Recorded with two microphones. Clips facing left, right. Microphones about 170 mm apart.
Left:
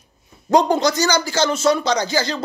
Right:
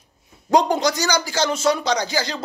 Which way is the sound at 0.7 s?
15° right (ahead or behind).